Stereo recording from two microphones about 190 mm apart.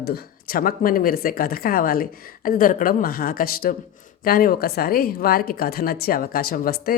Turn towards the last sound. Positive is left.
turn(degrees=50)  # may be behind; listen again after turning